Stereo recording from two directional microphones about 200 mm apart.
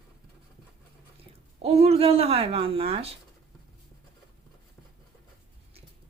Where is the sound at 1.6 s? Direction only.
30° right (ahead or behind).